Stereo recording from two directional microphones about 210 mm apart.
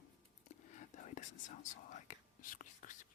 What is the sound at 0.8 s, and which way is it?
Whispering, 35° left (ahead or behind).